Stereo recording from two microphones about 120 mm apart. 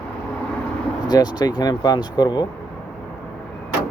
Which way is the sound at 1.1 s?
35° left (ahead or behind).